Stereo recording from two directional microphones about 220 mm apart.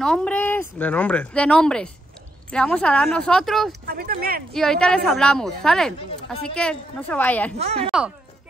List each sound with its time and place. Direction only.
0.0 s speech: 5° left (ahead or behind)
3.8 s speech: 45° right (ahead or behind)
4.6 s speech: 5° left (ahead or behind)
7.5 s speech: 30° right (ahead or behind)